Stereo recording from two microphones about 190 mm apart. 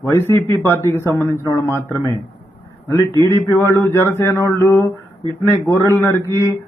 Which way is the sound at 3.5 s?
10° left (ahead or behind).